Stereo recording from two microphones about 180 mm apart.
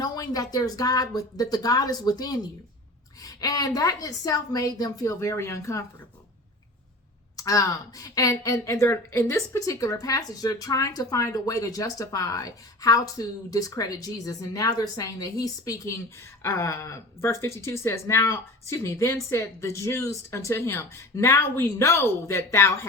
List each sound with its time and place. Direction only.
0.0 s a woman's voice: 20° left (ahead or behind)
7.3 s a woman's voice: 20° left (ahead or behind)